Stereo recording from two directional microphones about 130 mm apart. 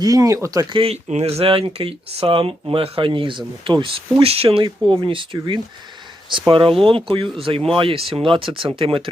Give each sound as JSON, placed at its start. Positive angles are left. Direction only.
{"t": 0.0, "sound": "speech", "side_deg": -25}
{"t": 0.7, "sound": "speech", "side_deg": -45}